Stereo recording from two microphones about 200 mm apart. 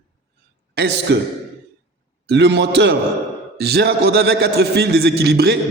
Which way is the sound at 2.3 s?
60° right (ahead or behind).